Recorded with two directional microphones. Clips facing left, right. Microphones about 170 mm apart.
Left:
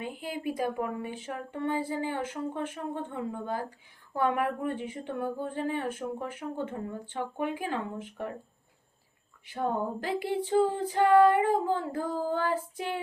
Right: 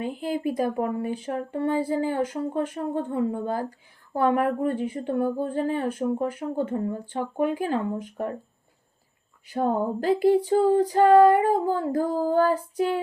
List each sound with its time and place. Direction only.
0.0 s speech: 45° right (ahead or behind)
9.5 s speech: 40° right (ahead or behind)